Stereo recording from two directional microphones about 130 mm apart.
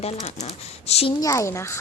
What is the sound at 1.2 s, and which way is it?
Speech, 25° left (ahead or behind).